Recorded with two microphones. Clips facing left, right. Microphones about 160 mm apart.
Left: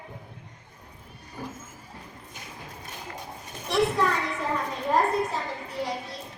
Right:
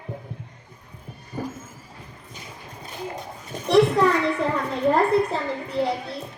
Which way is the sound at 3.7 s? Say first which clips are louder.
Right 7 dB; 70° right (ahead or behind).